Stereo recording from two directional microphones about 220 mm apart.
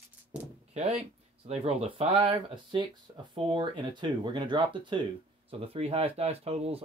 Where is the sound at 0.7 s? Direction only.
30° right (ahead or behind).